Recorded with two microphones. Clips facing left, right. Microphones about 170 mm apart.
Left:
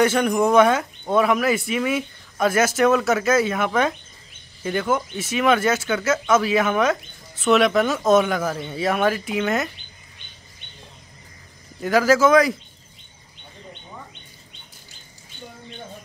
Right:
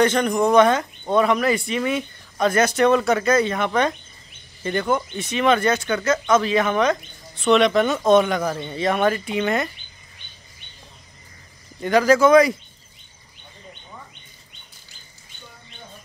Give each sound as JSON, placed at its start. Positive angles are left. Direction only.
{"t": 0.0, "sound": "speech", "side_deg": 5}
{"t": 11.8, "sound": "speech", "side_deg": 5}